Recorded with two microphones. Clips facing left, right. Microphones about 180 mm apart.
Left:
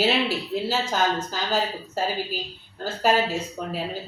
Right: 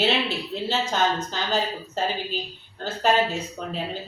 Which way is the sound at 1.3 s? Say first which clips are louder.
Even; 10° left (ahead or behind).